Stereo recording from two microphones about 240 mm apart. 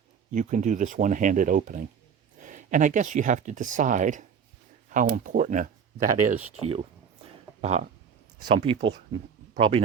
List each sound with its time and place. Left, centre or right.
0.3 s speech: right
6.6 s a sound: right
8.4 s speech: right